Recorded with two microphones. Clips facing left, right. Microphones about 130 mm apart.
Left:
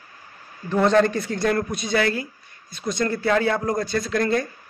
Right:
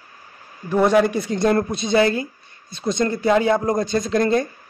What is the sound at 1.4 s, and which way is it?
A man's voice, 25° right (ahead or behind).